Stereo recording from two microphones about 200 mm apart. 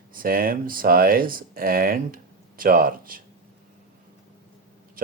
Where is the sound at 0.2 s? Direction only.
45° right (ahead or behind).